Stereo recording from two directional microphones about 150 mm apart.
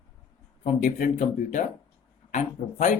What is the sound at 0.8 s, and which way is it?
Speech, 55° left (ahead or behind).